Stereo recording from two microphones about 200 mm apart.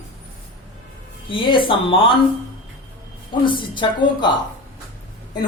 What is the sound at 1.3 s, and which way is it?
Speech, 25° left (ahead or behind).